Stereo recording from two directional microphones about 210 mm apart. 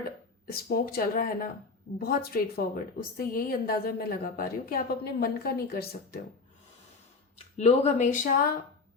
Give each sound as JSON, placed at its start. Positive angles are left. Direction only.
{"t": 0.4, "sound": "a woman's voice", "side_deg": 45}
{"t": 7.5, "sound": "speech", "side_deg": 30}